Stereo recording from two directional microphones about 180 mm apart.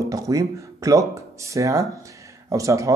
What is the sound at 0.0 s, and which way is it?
Speech, 20° right (ahead or behind).